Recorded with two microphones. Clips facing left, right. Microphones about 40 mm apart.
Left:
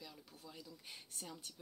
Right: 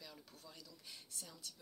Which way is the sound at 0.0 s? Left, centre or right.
Centre.